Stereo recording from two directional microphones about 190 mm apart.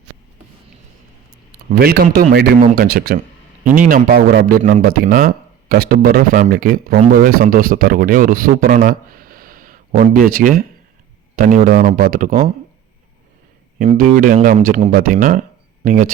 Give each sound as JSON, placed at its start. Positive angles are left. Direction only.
{"t": 1.7, "sound": "a man's voice", "side_deg": -55}
{"t": 13.9, "sound": "a man's voice", "side_deg": -45}